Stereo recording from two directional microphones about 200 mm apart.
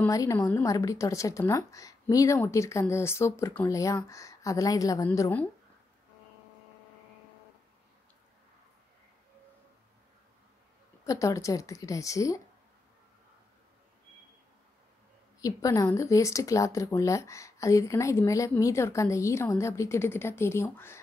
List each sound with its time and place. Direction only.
0.0 s speech: 15° left (ahead or behind)
11.1 s speech: 15° left (ahead or behind)
15.4 s speech: 15° left (ahead or behind)